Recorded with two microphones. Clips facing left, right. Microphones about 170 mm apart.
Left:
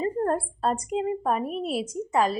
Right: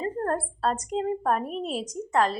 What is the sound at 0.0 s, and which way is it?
A woman's voice, 10° left (ahead or behind).